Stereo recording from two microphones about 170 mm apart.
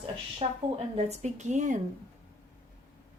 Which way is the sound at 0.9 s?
40° right (ahead or behind).